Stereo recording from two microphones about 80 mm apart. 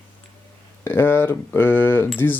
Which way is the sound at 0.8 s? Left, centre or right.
Left.